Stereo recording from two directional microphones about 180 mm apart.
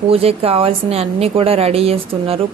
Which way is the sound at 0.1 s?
35° right (ahead or behind).